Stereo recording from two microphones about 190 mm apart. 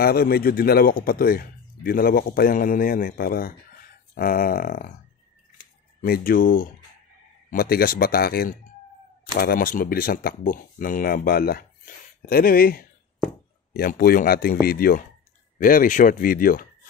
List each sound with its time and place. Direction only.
0.0 s speech: 55° left (ahead or behind)
5.9 s speech: 50° left (ahead or behind)